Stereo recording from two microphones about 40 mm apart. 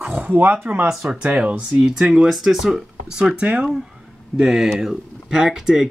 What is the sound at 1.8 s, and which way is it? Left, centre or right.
Speech, centre.